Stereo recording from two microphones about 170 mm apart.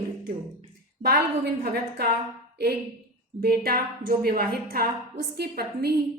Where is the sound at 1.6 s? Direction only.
70° right (ahead or behind).